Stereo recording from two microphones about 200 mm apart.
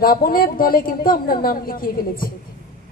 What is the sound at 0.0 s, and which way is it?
A man's voice, 45° left (ahead or behind).